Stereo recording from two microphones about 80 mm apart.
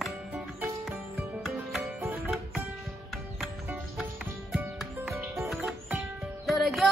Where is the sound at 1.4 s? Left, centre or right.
Centre.